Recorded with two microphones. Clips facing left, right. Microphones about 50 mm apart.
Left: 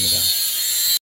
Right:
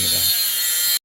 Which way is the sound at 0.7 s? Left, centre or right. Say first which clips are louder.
Even; right.